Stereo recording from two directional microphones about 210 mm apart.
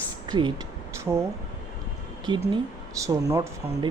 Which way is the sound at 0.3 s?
20° right (ahead or behind).